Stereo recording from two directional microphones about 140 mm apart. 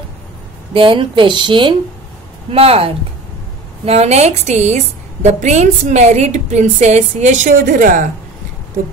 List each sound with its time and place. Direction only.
0.7 s a woman's voice: 40° right (ahead or behind); by 8.1 s 70° right (ahead or behind)